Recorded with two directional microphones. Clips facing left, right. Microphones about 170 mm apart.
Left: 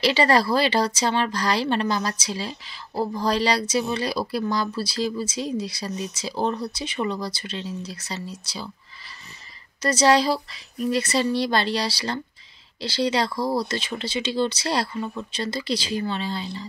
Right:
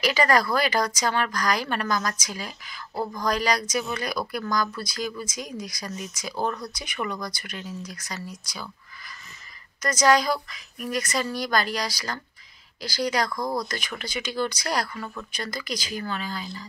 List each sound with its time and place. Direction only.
0.0 s speech: 30° left (ahead or behind)
9.8 s speech: 30° left (ahead or behind)